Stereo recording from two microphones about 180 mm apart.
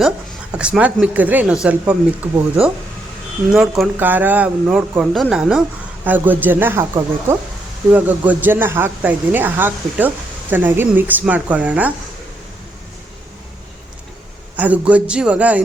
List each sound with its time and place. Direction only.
0.5 s a woman's voice: 5° right (ahead or behind)
3.5 s a woman's voice: 5° right (ahead or behind)
14.5 s a woman's voice: 10° right (ahead or behind)